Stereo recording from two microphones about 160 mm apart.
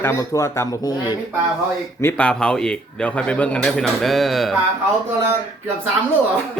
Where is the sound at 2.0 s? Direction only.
10° left (ahead or behind).